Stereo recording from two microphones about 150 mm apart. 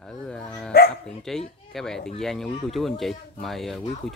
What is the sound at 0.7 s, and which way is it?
Speech, 90° left.